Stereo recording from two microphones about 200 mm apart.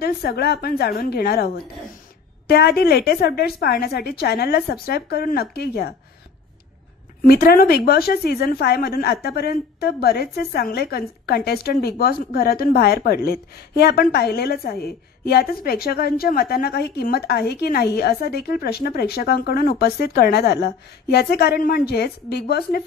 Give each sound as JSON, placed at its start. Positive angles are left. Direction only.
{"t": 0.0, "sound": "a woman's voice", "side_deg": 50}
{"t": 7.2, "sound": "a woman's voice", "side_deg": 50}